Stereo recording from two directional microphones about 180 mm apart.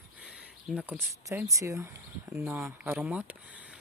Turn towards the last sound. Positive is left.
turn(degrees=-10)  # may be behind; listen again after turning